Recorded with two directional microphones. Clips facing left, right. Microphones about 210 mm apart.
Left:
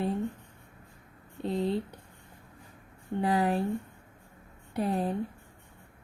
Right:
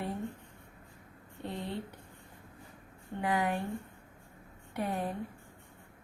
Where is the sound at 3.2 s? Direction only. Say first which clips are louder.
Left 4 dB; 30° left (ahead or behind).